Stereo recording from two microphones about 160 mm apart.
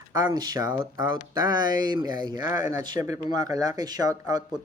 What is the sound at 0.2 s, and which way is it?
Speech, 25° right (ahead or behind).